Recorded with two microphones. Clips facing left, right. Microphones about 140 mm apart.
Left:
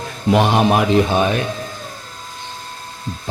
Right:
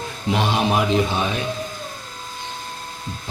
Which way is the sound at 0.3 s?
50° left (ahead or behind).